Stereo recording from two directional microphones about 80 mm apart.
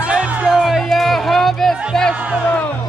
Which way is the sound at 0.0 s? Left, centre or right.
Centre.